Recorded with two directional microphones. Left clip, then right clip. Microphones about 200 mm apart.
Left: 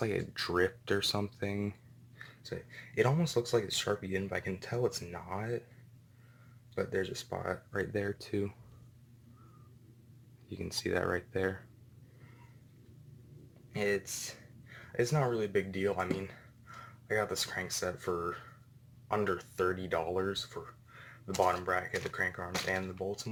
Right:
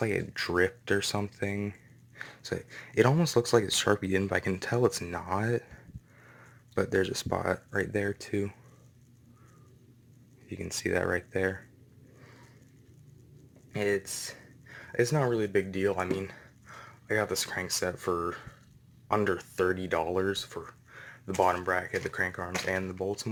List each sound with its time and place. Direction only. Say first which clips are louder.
0.0 s speech: right 4 dB; 15° right (ahead or behind)
2.1 s speech: right 7 dB; 40° right (ahead or behind)
6.7 s speech: right 6 dB; 45° right (ahead or behind); by 8.5 s 10° right (ahead or behind)
10.5 s speech: right 4 dB; 10° right (ahead or behind)
13.7 s speech: right 3 dB; 40° right (ahead or behind)